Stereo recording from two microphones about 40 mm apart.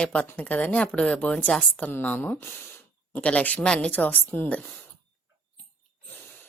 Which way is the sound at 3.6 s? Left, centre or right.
Left.